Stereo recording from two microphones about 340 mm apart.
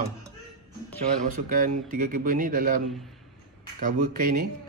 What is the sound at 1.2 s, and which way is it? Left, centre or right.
A man's voice, right.